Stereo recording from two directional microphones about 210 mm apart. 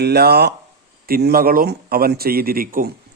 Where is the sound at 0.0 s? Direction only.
50° right (ahead or behind).